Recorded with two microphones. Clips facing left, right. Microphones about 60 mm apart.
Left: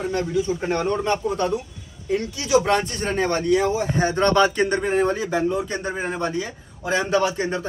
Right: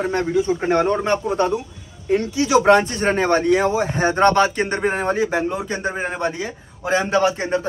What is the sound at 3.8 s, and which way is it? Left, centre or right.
Speech, right.